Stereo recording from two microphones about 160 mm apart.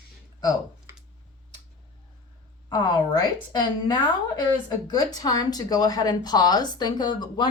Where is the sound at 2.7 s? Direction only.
25° left (ahead or behind).